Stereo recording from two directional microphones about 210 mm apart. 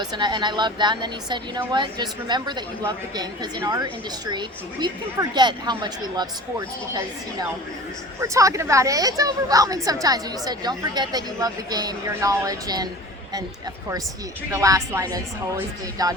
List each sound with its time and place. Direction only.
0.0 s a woman's voice: 20° right (ahead or behind)
8.2 s a woman's voice: 15° right (ahead or behind)
14.5 s a woman's voice: 15° right (ahead or behind)